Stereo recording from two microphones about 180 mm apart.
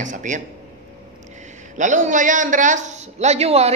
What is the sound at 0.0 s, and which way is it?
Speech, 45° right (ahead or behind).